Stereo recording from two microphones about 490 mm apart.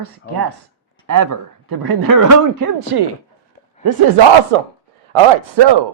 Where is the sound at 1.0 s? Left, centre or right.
Right.